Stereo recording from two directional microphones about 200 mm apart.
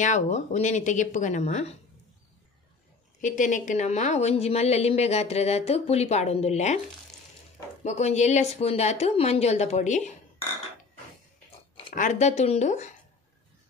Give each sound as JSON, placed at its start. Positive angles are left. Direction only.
{"t": 0.0, "sound": "a woman's voice", "side_deg": 35}
{"t": 3.2, "sound": "a woman's voice", "side_deg": 40}
{"t": 7.8, "sound": "a woman's voice", "side_deg": 35}
{"t": 11.9, "sound": "a woman's voice", "side_deg": 40}